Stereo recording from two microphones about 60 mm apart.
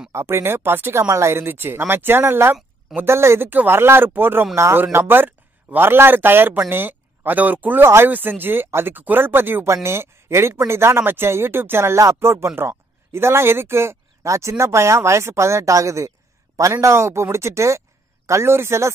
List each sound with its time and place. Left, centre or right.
0.1 s speech: right
1.0 s speech: right
3.4 s speech: right
7.8 s speech: right
8.1 s speech: right
9.8 s speech: right